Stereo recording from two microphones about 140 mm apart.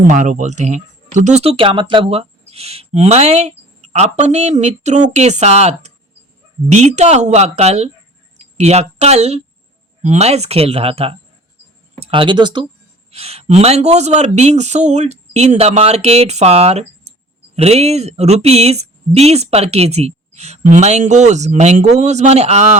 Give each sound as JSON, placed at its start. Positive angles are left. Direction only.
{"t": 0.1, "sound": "speech", "side_deg": -60}
{"t": 13.1, "sound": "speech", "side_deg": -45}